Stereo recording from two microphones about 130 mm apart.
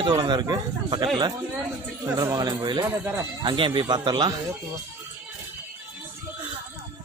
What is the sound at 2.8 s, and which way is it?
Speech, 20° right (ahead or behind).